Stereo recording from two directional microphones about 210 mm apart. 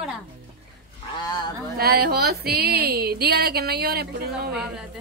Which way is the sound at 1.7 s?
45° right (ahead or behind).